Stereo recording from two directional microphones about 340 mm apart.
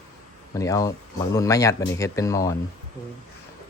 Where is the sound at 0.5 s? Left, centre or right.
Centre.